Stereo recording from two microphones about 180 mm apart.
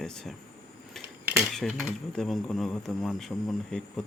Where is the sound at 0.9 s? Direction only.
Centre (ahead or behind).